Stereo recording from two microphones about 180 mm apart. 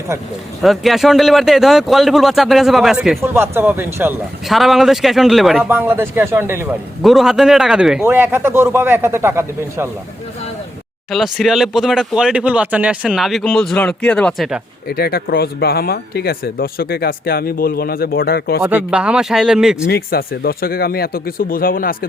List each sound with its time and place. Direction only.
0.6 s speech: centre (ahead or behind)
3.2 s a man's voice: 15° right (ahead or behind)
4.4 s speech: centre (ahead or behind)
5.6 s a man's voice: 10° right (ahead or behind)
7.0 s a man's voice: centre (ahead or behind)
11.1 s speech: centre (ahead or behind)
14.8 s speech: 60° left (ahead or behind)
18.6 s speech: 10° right (ahead or behind)
19.9 s speech: 55° left (ahead or behind)